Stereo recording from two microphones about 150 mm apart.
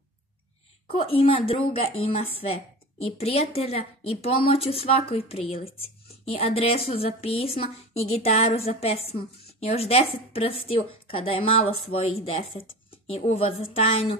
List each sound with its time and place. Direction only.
0.8 s a woman's voice: 40° left (ahead or behind)